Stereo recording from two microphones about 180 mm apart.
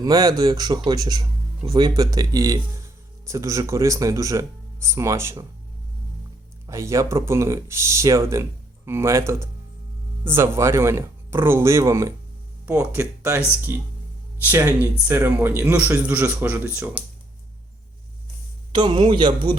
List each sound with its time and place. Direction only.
0.0 s a man's voice: 20° right (ahead or behind)
6.7 s speech: 15° right (ahead or behind)
18.7 s a man's voice: 25° right (ahead or behind)